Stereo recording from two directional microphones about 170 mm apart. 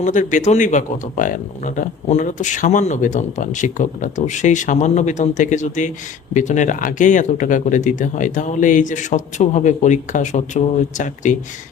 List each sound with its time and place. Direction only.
0.0 s speech: 50° left (ahead or behind)